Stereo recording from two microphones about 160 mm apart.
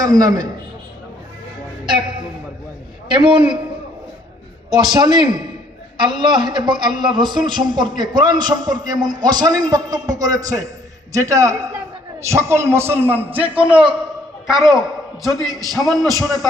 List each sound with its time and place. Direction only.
0.0 s a man's voice: 25° right (ahead or behind)
1.9 s a man's voice: 30° right (ahead or behind)
4.7 s a man's voice: 25° right (ahead or behind); by 16.5 s centre (ahead or behind)